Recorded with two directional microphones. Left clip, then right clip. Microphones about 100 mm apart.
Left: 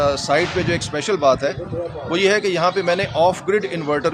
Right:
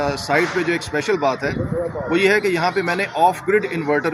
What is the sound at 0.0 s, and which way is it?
Speech, 50° left (ahead or behind).